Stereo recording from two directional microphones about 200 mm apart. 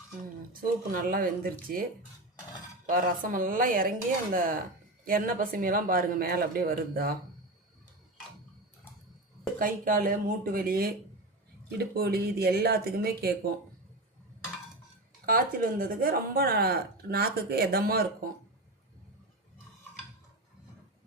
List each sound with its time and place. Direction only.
0.5 s speech: 45° right (ahead or behind)
2.9 s speech: 45° right (ahead or behind)
9.6 s speech: 45° right (ahead or behind)
15.3 s speech: 45° right (ahead or behind)